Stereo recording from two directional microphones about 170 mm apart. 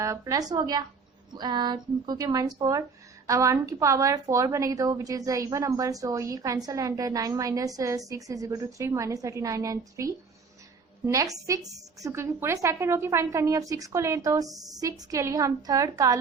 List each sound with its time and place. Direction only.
0.0 s a woman's voice: 20° right (ahead or behind)